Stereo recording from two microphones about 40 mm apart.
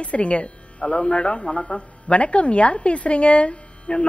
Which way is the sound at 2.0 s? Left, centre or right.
Left.